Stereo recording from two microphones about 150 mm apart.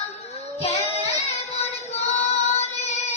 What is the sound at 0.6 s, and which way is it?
Child singing, 45° left (ahead or behind).